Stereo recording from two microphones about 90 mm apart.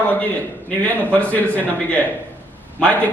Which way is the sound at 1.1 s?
15° left (ahead or behind).